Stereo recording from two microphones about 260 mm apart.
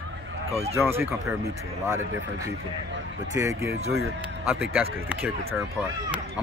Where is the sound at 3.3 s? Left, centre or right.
Centre.